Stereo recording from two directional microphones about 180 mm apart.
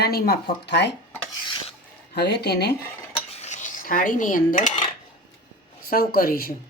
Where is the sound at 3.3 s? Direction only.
40° left (ahead or behind).